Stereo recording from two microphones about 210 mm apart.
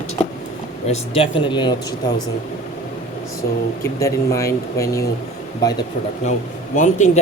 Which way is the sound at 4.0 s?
15° left (ahead or behind).